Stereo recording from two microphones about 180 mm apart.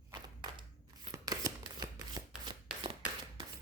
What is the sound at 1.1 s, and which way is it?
Shuffling cards, 20° right (ahead or behind).